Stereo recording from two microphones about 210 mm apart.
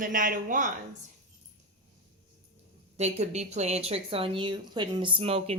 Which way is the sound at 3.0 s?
30° right (ahead or behind).